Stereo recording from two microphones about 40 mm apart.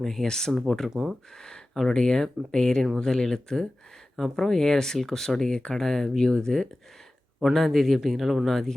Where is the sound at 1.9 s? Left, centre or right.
Centre.